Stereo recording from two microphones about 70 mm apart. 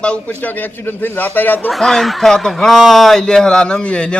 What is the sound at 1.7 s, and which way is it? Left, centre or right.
A man's voice, centre.